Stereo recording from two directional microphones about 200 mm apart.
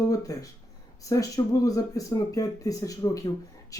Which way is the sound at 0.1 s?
15° left (ahead or behind).